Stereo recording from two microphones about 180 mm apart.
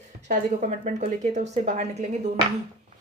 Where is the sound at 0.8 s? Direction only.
40° right (ahead or behind).